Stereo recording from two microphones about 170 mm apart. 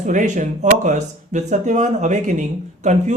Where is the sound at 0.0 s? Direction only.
45° right (ahead or behind).